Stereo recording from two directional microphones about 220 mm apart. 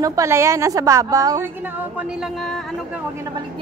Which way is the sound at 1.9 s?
5° right (ahead or behind).